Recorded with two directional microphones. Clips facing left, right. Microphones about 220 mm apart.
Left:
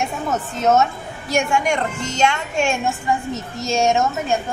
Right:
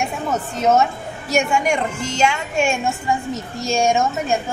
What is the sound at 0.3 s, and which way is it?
A woman's voice, 10° right (ahead or behind).